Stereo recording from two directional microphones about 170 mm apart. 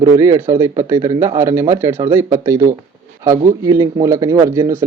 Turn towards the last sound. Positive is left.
turn(degrees=-15)  # may be behind; listen again after turning